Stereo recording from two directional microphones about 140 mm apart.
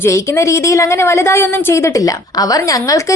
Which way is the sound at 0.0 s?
20° left (ahead or behind).